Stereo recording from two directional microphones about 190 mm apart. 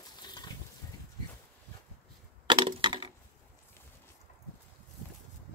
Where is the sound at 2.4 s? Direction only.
25° right (ahead or behind).